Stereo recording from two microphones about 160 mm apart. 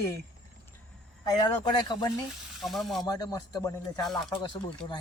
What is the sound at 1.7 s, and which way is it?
Speech, 25° left (ahead or behind).